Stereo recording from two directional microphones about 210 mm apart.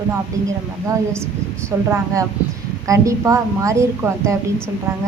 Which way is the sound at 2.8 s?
15° right (ahead or behind).